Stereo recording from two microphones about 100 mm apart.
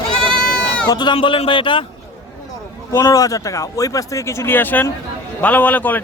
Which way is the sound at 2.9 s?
35° left (ahead or behind).